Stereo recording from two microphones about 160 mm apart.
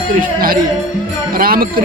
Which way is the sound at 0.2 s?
65° right (ahead or behind).